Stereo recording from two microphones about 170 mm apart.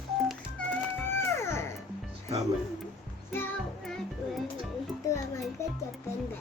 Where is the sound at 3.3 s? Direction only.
10° left (ahead or behind).